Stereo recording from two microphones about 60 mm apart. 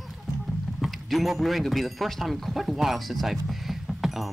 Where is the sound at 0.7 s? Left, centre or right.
Centre.